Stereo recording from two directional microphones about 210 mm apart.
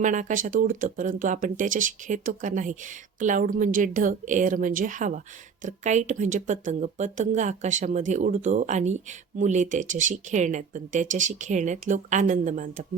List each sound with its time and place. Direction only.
0.0 s a woman's voice: 35° right (ahead or behind)